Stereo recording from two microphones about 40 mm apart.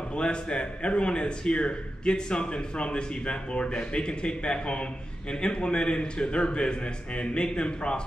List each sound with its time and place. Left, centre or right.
0.1 s a man's voice: left